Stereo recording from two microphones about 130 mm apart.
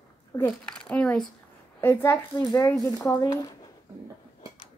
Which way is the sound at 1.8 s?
20° left (ahead or behind).